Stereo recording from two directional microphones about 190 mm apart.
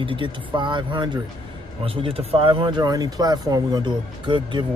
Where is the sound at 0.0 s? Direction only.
25° right (ahead or behind).